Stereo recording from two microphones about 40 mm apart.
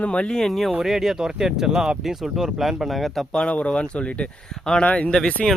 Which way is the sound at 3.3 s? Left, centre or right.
Left.